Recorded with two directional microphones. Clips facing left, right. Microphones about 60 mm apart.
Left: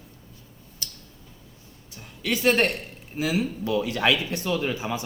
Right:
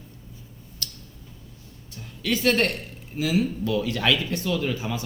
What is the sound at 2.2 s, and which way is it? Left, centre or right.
Speech, left.